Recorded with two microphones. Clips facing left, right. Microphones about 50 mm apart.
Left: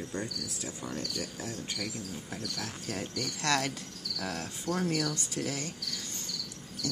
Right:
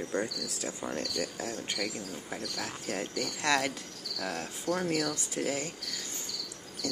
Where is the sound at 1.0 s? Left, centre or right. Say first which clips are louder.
Right 3 dB; right.